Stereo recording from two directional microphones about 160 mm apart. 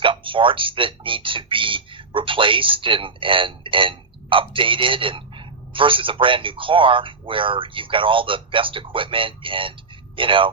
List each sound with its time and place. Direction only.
0.0 s speech: 35° right (ahead or behind)